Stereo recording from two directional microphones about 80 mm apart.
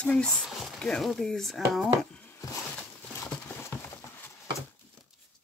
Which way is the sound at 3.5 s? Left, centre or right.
Left.